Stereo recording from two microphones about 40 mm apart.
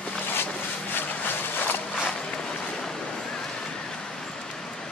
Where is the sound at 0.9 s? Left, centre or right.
Left.